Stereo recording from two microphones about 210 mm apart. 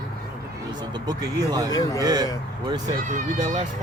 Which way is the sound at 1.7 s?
15° left (ahead or behind).